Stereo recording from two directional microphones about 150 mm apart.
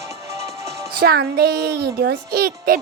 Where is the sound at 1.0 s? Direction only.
90° right.